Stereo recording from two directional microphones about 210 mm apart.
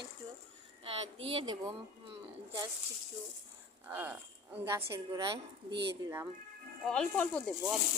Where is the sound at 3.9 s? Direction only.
10° right (ahead or behind).